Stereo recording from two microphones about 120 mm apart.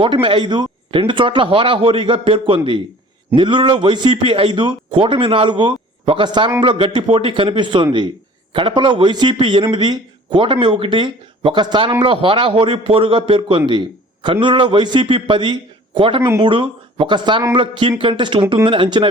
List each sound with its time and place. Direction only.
0.0 s a man's voice: 45° right (ahead or behind)